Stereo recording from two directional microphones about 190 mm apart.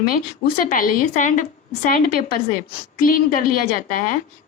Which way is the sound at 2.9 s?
50° left (ahead or behind).